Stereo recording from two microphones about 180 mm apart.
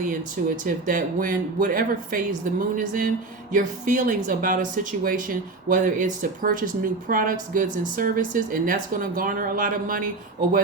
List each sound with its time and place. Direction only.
0.0 s speech: 50° right (ahead or behind)